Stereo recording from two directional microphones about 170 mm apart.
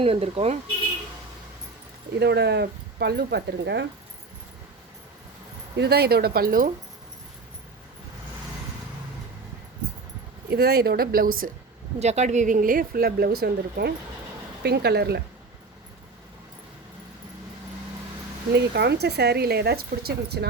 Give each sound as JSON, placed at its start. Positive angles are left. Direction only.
{"t": 0.0, "sound": "speech", "side_deg": -35}
{"t": 2.1, "sound": "speech", "side_deg": -80}
{"t": 5.7, "sound": "speech", "side_deg": -75}
{"t": 10.5, "sound": "speech", "side_deg": -70}
{"t": 11.9, "sound": "speech", "side_deg": -40}
{"t": 18.5, "sound": "speech", "side_deg": -75}